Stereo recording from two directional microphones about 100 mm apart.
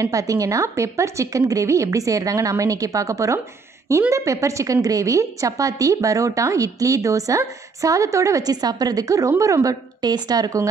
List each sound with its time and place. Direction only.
0.0 s a woman's voice: 35° right (ahead or behind)